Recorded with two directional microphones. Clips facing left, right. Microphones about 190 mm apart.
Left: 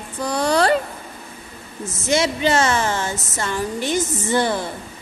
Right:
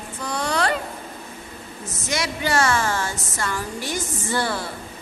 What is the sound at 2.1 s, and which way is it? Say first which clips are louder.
A woman's voice: left 6 dB; 25° left (ahead or behind).